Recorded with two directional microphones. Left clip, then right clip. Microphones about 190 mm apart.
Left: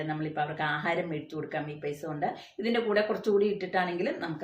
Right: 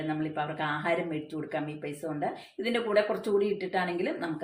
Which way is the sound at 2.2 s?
15° right (ahead or behind).